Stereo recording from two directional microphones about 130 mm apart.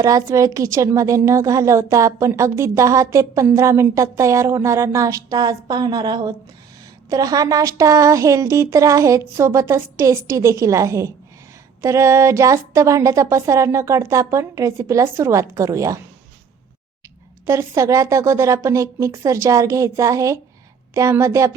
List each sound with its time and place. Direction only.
0.0 s a woman's voice: 25° right (ahead or behind)
17.4 s a woman's voice: 20° right (ahead or behind)